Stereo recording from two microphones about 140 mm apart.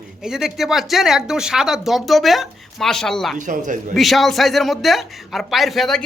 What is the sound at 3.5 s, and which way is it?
Speech, 65° right (ahead or behind).